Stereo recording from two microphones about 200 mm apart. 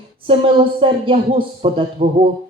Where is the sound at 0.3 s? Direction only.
25° right (ahead or behind).